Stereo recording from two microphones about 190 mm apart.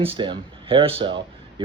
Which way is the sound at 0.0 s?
25° right (ahead or behind).